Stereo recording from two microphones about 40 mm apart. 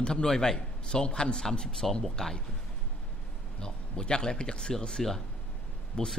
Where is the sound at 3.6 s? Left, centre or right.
Centre.